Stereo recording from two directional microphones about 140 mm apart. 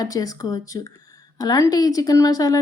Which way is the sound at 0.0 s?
25° left (ahead or behind).